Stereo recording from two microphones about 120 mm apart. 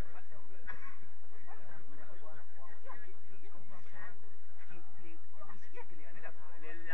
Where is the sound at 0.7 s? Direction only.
35° left (ahead or behind).